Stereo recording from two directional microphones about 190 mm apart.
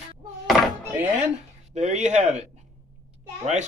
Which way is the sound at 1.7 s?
35° right (ahead or behind).